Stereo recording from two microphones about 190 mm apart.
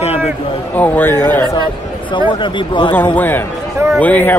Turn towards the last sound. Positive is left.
turn(degrees=10)  # may be behind; listen again after turning